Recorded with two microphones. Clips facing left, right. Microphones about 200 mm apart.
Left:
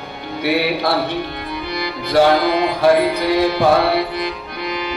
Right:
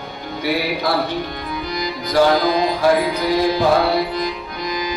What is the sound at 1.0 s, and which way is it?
Music, 60° left (ahead or behind).